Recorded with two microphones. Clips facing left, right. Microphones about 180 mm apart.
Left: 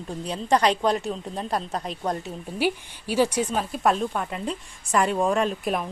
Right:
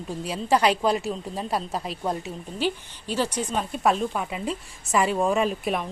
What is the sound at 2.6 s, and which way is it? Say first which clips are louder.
Speech: left 2 dB; 10° left (ahead or behind).